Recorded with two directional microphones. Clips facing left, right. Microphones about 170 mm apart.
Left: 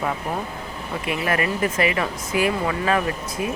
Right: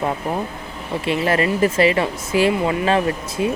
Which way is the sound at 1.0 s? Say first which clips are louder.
Right 5 dB; 30° right (ahead or behind).